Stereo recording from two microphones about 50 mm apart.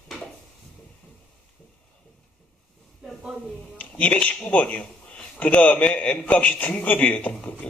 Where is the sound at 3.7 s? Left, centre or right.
Left.